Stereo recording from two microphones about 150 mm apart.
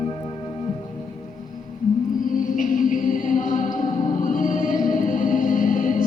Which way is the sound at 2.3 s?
60° left (ahead or behind).